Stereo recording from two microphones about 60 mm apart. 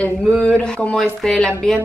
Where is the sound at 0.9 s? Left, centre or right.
Centre.